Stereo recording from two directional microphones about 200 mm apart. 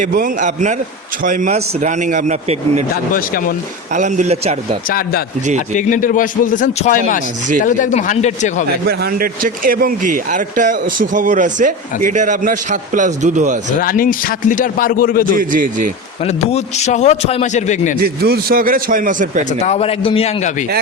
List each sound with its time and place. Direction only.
0.0 s speech: 45° right (ahead or behind)
2.9 s a man's voice: 45° left (ahead or behind)
3.9 s speech: 40° right (ahead or behind)
4.9 s a man's voice: 45° left (ahead or behind)
8.9 s speech: 50° right (ahead or behind)
13.8 s a man's voice: 45° left (ahead or behind)
15.4 s a man's voice: 45° right (ahead or behind)
16.2 s a man's voice: 30° left (ahead or behind)
18.0 s a man's voice: 50° right (ahead or behind)
19.5 s a man's voice: 35° left (ahead or behind)